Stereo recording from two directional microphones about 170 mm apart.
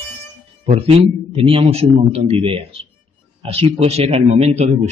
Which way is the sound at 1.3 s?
30° right (ahead or behind).